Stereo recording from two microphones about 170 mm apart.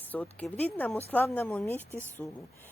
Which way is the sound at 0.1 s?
10° left (ahead or behind).